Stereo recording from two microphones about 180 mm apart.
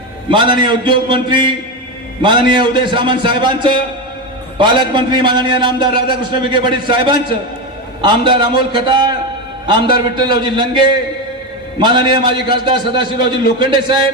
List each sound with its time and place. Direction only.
0.3 s a man's voice: 25° right (ahead or behind)
10.2 s a man's voice: 25° right (ahead or behind)